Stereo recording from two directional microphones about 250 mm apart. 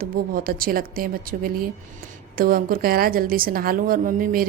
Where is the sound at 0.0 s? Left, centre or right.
Right.